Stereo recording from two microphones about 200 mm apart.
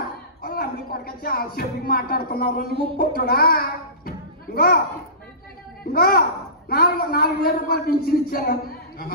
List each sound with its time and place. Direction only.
0.4 s a child's voice: 50° left (ahead or behind)
5.9 s a woman's voice: 50° left (ahead or behind)